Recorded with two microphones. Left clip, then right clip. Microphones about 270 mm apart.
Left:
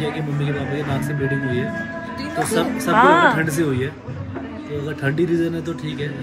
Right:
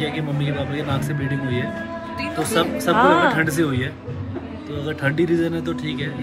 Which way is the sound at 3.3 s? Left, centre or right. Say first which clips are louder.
Right 1 dB; right.